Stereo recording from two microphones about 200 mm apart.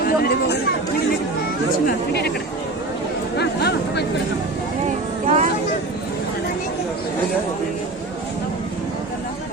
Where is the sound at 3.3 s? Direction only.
55° left (ahead or behind).